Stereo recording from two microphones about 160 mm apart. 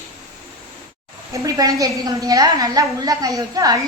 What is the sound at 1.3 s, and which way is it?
A woman's voice, 20° right (ahead or behind).